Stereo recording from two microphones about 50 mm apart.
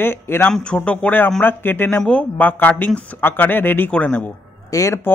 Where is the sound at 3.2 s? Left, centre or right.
Left.